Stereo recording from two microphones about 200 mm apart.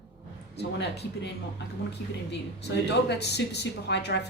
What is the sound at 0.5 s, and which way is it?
Speech, 60° left (ahead or behind).